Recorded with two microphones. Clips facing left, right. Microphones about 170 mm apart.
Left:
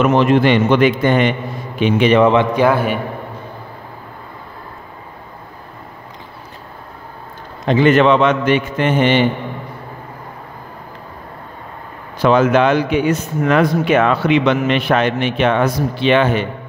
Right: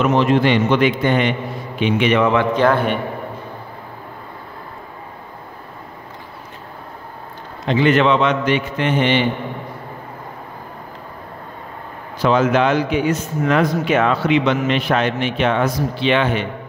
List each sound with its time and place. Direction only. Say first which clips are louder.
0.0 s a man's voice: left 3 dB; 55° left (ahead or behind); by 2.4 s 30° left (ahead or behind)
2.5 s a man's voice: left 1 dB; 10° left (ahead or behind)
7.6 s a man's voice: left 3 dB; 45° left (ahead or behind)
12.2 s a man's voice: left 3 dB; 60° left (ahead or behind)